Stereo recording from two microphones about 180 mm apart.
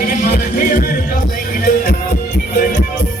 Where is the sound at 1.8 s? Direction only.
55° left (ahead or behind).